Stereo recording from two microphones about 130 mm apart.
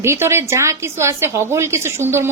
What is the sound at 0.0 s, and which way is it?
A woman's voice, 20° right (ahead or behind).